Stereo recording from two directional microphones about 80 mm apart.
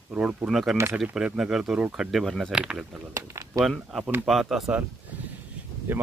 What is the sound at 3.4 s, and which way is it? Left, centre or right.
Speech, right.